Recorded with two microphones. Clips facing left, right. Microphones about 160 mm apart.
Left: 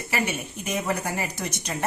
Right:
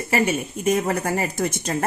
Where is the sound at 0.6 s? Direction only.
50° right (ahead or behind).